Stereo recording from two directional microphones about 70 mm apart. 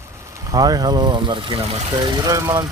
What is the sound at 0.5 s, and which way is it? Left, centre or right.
Speech, right.